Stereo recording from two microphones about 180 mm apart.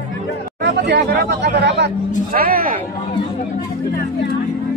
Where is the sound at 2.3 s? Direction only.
55° right (ahead or behind).